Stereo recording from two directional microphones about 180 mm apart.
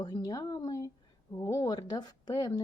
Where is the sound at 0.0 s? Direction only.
20° left (ahead or behind).